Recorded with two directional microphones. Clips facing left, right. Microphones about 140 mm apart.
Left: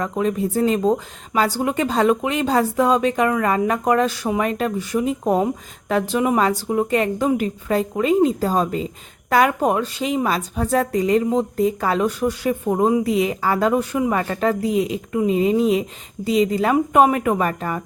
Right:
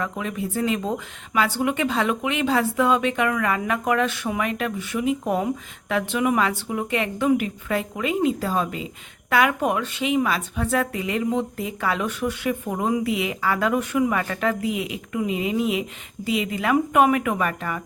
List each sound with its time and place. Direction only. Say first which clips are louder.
0.0 s a woman's voice: left 7 dB; 35° left (ahead or behind)